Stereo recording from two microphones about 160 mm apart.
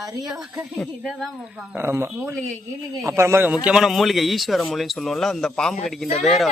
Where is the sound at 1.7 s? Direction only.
15° right (ahead or behind); by 6.5 s centre (ahead or behind).